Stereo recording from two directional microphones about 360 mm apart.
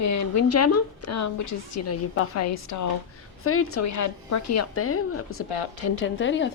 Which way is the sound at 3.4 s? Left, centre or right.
Left.